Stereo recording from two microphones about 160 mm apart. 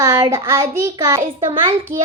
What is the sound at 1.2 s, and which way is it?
Speech, 30° right (ahead or behind).